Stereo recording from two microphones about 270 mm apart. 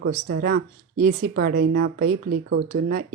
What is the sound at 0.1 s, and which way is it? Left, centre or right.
A woman's voice, right.